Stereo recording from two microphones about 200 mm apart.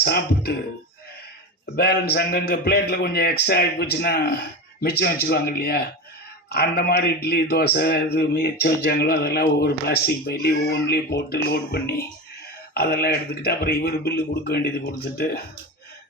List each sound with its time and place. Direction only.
0.0 s speech: 55° left (ahead or behind)
1.6 s a man's voice: 55° left (ahead or behind)